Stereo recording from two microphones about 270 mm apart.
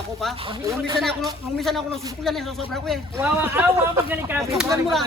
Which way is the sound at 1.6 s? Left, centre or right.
Centre.